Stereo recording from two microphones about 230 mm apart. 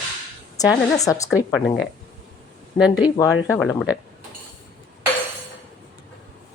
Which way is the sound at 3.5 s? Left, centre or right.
Centre.